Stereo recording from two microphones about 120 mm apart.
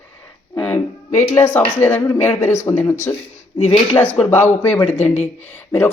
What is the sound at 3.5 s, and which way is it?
Speech, 55° left (ahead or behind).